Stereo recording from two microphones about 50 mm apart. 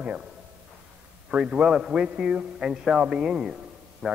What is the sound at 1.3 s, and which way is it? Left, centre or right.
A man's voice, right.